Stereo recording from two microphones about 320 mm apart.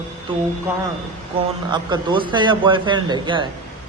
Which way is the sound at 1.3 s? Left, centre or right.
Centre.